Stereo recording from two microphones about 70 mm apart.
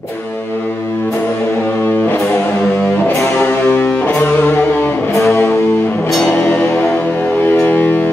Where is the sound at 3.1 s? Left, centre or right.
Left.